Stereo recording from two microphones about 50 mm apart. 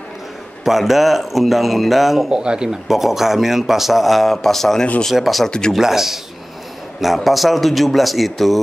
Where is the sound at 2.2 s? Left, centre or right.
Centre.